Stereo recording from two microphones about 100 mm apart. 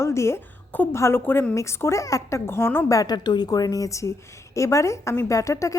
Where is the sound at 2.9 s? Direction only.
40° left (ahead or behind).